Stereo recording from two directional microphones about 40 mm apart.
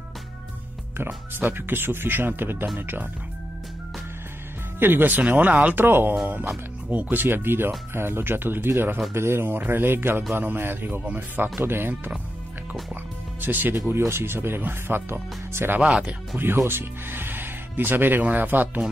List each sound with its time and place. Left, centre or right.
0.9 s speech: right
4.7 s speech: right
5.3 s speech: right
5.8 s speech: right
9.1 s speech: right
9.7 s speech: right
13.4 s speech: right
15.8 s speech: right
16.3 s speech: right